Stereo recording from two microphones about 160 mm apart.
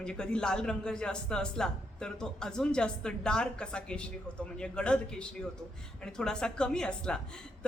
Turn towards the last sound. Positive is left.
turn(degrees=5)  # may be behind; listen again after turning